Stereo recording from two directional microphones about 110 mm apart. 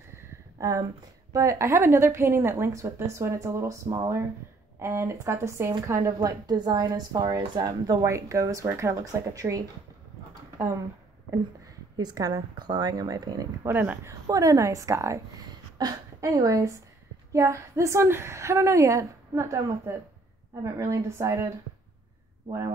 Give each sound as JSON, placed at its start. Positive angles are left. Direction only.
{"t": 0.1, "sound": "a sound", "side_deg": -30}
{"t": 1.3, "sound": "a woman's voice", "side_deg": -30}
{"t": 6.1, "sound": "a woman's voice", "side_deg": -40}
{"t": 11.2, "sound": "a woman's voice", "side_deg": -35}
{"t": 13.7, "sound": "a woman's voice", "side_deg": -20}
{"t": 14.2, "sound": "a woman's voice", "side_deg": -30}